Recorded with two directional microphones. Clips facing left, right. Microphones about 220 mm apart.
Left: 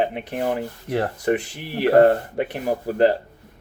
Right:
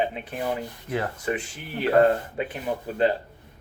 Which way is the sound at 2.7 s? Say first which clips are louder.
Left 5 dB; 40° left (ahead or behind).